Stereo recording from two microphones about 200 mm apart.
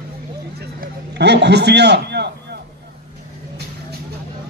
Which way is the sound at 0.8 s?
55° right (ahead or behind).